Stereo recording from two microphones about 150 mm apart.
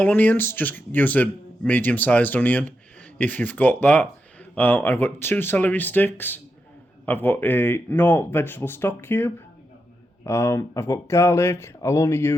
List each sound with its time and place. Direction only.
0.0 s speech: 10° left (ahead or behind)